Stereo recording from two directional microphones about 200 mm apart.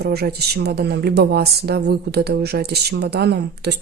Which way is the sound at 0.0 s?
55° right (ahead or behind).